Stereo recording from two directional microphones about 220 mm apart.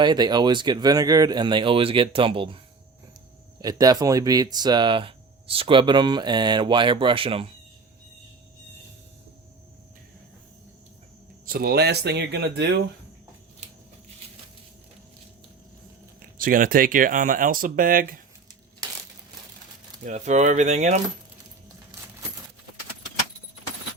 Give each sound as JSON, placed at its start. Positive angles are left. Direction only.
{"t": 0.0, "sound": "speech", "side_deg": -20}
{"t": 3.6, "sound": "speech", "side_deg": -15}
{"t": 11.4, "sound": "speech", "side_deg": -40}
{"t": 16.4, "sound": "speech", "side_deg": -40}
{"t": 20.1, "sound": "speech", "side_deg": -35}